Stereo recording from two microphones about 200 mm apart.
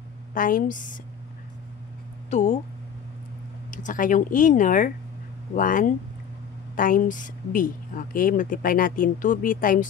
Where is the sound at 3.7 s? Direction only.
40° left (ahead or behind).